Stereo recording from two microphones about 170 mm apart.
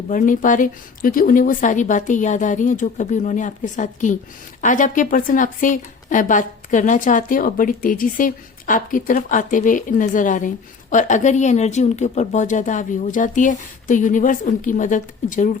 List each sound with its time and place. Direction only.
0.1 s a woman's voice: 50° left (ahead or behind)